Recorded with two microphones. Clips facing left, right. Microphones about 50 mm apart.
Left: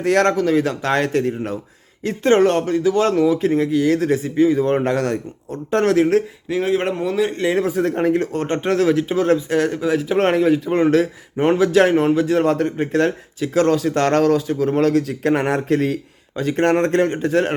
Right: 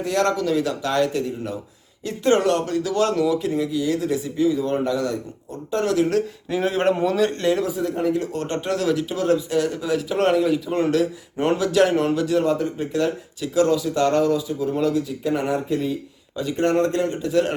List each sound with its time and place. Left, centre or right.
0.0 s speech: left
0.3 s speech: left
6.0 s speech: left
6.5 s speech: centre
7.5 s speech: left
16.3 s speech: left